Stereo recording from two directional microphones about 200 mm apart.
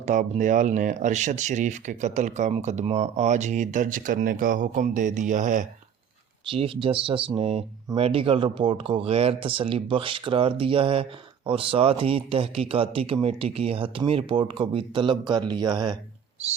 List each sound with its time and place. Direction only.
0.0 s speech: 40° right (ahead or behind)
6.5 s speech: 25° right (ahead or behind)